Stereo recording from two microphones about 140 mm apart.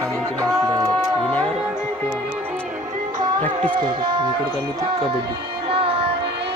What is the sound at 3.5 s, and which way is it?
Speech, 35° right (ahead or behind).